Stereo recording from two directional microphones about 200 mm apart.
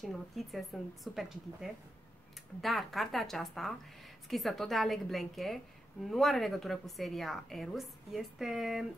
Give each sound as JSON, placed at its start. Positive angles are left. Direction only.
{"t": 0.0, "sound": "a woman's voice", "side_deg": 0}